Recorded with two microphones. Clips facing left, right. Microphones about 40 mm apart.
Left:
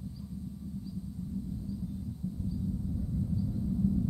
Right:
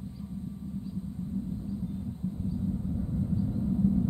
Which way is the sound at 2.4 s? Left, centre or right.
Right.